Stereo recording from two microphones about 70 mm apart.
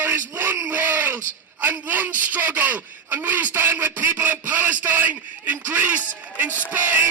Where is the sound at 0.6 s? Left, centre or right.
Right.